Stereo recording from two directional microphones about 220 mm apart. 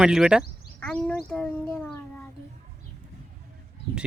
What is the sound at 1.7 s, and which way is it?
Child singing, 5° left (ahead or behind).